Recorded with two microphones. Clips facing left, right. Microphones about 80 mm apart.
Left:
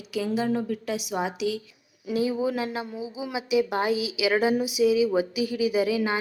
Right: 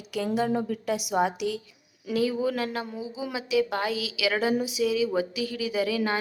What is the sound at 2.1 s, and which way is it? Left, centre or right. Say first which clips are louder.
A woman's voice: even; left.